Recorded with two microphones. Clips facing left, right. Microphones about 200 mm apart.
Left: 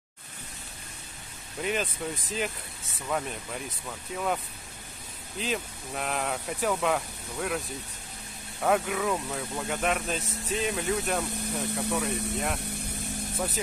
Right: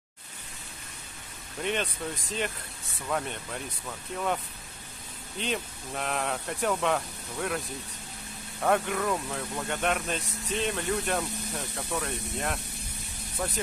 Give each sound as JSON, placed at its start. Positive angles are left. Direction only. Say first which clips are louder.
{"t": 1.6, "sound": "speech", "louder": "left 1 dB", "side_deg": 5}
{"t": 5.4, "sound": "speech", "louder": "even", "side_deg": 0}